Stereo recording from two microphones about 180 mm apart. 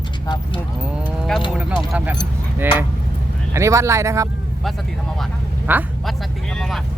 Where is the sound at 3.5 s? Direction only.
15° right (ahead or behind).